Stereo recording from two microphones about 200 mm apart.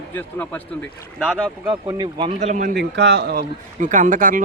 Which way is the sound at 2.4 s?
40° right (ahead or behind).